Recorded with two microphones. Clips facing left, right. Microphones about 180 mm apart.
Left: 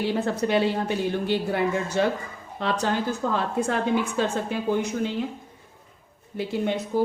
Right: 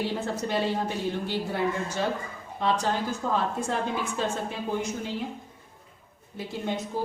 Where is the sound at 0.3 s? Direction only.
70° left (ahead or behind).